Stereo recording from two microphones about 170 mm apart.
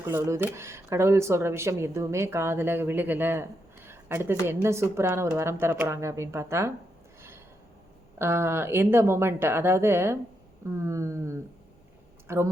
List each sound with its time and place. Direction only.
0.0 s speech: 15° right (ahead or behind)
7.2 s snort: 15° right (ahead or behind)
8.2 s speech: 15° right (ahead or behind)